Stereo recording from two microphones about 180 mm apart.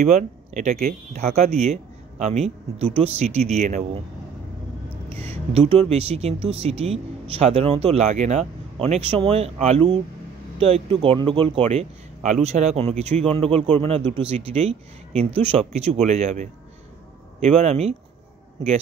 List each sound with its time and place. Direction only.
0.0 s speech: 40° right (ahead or behind)
5.1 s speech: 35° right (ahead or behind)
11.7 s speech: 40° right (ahead or behind)